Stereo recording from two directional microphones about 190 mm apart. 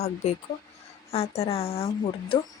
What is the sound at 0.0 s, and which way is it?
Speech, 35° left (ahead or behind).